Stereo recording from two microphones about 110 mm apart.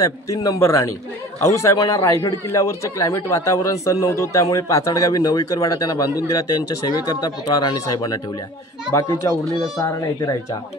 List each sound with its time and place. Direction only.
0.0 s a man's voice: 30° left (ahead or behind)